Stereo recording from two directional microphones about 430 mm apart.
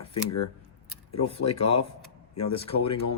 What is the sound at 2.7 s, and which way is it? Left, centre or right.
Speech, left.